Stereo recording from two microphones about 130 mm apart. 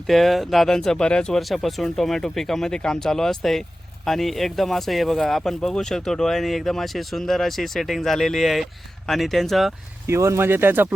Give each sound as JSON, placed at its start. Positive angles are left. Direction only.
{"t": 0.1, "sound": "speech", "side_deg": 0}
{"t": 10.1, "sound": "speech", "side_deg": -20}